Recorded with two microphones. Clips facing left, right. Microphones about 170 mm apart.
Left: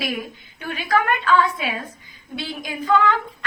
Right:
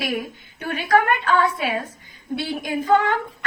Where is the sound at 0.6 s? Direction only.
45° right (ahead or behind).